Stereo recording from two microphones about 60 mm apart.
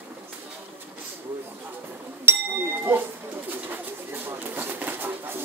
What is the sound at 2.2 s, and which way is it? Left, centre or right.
Bird, right.